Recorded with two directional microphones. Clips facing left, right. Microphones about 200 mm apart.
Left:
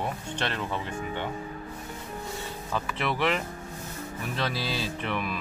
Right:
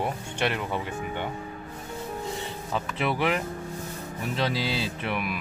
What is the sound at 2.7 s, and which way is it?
Speech, 15° right (ahead or behind).